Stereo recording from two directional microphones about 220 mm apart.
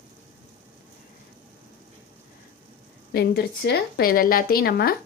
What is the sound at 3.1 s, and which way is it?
Speech, 45° left (ahead or behind).